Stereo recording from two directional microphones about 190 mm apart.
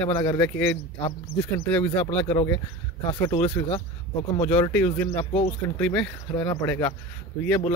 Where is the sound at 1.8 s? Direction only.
30° left (ahead or behind).